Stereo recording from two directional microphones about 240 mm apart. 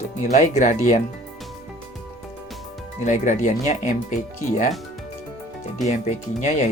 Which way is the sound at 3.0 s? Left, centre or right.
Left.